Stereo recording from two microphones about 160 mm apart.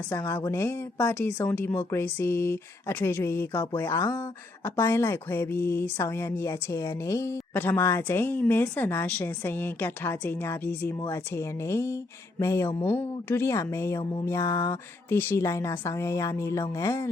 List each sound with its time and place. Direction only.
0.1 s speech: 10° left (ahead or behind)